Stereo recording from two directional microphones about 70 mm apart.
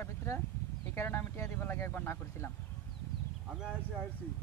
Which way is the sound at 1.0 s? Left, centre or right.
Left.